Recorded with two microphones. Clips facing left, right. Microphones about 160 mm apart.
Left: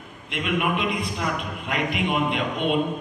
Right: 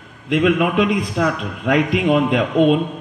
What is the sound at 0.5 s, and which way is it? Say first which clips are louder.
A man's voice: right 7 dB; 90° right.